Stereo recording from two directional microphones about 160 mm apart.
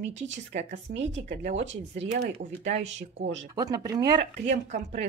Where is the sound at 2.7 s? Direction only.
45° right (ahead or behind).